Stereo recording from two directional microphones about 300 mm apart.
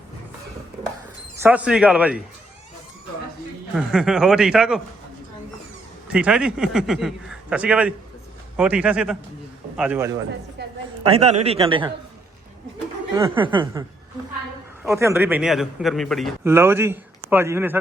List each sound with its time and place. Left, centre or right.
1.4 s a man's voice: centre
3.8 s a man's voice: centre
6.1 s a man's voice: centre
10.6 s a sound: right
11.0 s a man's voice: right
13.1 s a man's voice: centre
14.8 s a man's voice: centre